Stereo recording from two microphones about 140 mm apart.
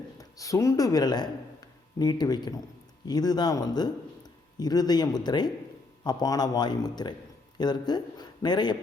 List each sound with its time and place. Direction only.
0.2 s a man's voice: 25° left (ahead or behind)